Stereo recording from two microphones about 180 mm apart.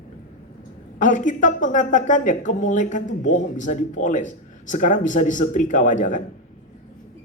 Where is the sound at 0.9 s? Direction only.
45° left (ahead or behind).